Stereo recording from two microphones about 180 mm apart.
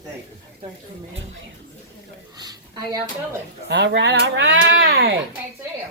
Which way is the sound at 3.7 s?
75° right (ahead or behind).